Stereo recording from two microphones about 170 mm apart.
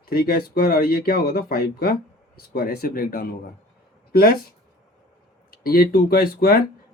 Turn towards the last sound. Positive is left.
turn(degrees=65)  # may be behind; listen again after turning